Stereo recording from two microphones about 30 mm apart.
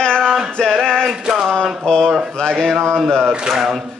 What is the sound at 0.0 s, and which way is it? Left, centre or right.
Male singing, centre.